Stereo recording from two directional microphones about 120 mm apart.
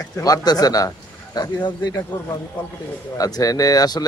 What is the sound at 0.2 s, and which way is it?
Speech, 30° left (ahead or behind).